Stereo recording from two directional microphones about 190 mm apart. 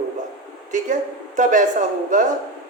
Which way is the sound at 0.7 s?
40° right (ahead or behind).